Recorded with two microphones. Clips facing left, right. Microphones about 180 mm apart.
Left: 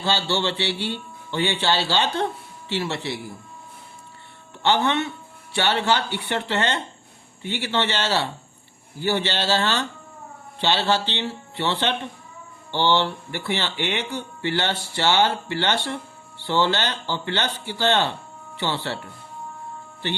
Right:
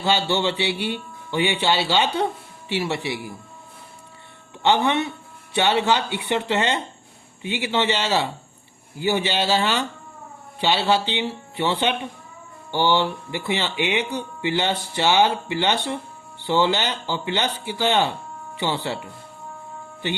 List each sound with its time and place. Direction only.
0.0 s speech: 15° right (ahead or behind)
4.6 s speech: 15° right (ahead or behind)